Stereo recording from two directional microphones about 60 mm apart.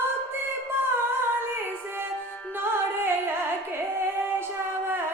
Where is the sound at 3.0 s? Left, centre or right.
Right.